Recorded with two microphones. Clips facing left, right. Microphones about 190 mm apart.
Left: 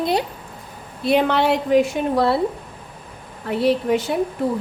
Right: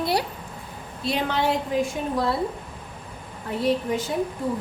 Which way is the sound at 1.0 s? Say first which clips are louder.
Left 7 dB; 60° left (ahead or behind).